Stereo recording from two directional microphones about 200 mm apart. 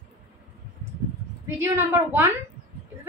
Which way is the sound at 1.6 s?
10° right (ahead or behind).